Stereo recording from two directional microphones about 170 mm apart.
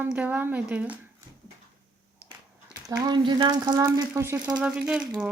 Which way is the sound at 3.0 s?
25° right (ahead or behind).